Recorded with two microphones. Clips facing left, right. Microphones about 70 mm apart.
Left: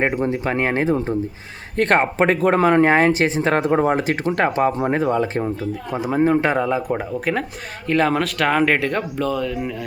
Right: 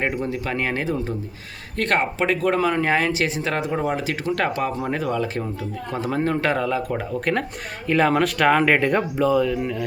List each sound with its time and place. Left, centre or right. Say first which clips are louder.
0.0 s speech: left 4 dB; left
5.9 s speech: left 5 dB; centre
7.3 s speech: even; centre